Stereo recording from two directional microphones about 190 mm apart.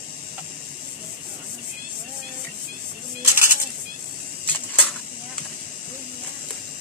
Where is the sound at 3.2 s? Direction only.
15° right (ahead or behind).